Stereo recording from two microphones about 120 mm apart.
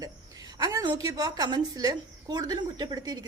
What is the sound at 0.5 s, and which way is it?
Speech, 35° right (ahead or behind).